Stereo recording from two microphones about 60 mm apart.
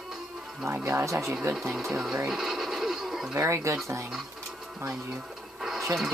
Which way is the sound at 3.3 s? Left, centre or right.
Right.